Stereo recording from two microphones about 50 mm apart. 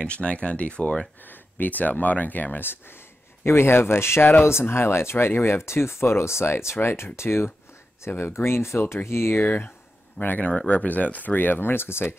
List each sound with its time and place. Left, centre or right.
0.0 s speech: left
1.2 s speech: left
4.2 s speech: left
4.5 s speech: left
9.4 s speech: left